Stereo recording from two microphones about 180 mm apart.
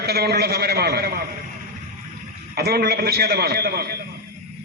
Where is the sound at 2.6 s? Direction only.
60° right (ahead or behind).